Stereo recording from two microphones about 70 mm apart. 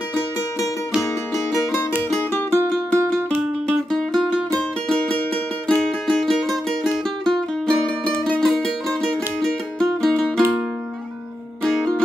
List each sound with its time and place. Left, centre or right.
2.3 s music: left
4.6 s music: centre